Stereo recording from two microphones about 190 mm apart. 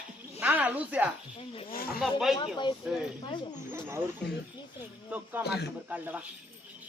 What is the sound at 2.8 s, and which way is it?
Speech, centre (ahead or behind).